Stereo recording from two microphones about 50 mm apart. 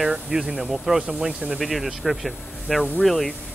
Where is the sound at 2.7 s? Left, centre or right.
Centre.